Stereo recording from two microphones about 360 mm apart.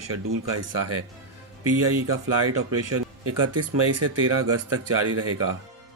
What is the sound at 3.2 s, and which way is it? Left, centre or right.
Speech, right.